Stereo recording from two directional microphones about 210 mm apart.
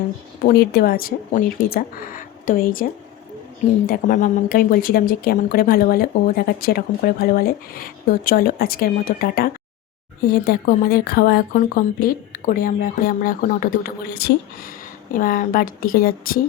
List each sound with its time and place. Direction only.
0.4 s speech: 50° left (ahead or behind)
3.8 s speech: 40° left (ahead or behind)